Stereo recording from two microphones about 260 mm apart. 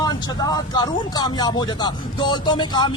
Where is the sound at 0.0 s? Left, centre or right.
Centre.